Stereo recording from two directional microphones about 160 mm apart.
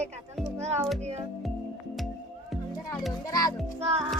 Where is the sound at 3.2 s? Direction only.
20° left (ahead or behind).